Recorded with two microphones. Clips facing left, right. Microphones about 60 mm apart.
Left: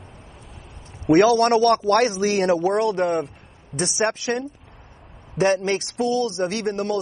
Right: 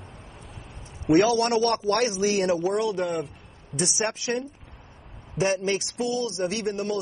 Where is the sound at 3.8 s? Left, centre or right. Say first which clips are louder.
Left 5 dB; left.